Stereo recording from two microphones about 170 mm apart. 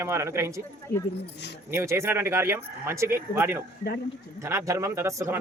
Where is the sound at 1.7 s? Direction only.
15° right (ahead or behind).